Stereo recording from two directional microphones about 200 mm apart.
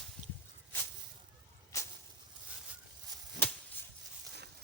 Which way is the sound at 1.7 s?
15° left (ahead or behind).